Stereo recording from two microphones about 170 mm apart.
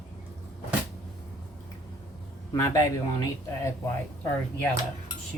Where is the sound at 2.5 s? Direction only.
20° left (ahead or behind).